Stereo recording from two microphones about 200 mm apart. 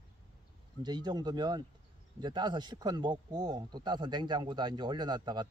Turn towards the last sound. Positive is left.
turn(degrees=-20)  # may be behind; listen again after turning